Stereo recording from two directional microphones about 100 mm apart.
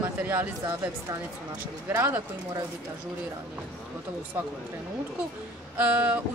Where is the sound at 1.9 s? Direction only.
25° right (ahead or behind).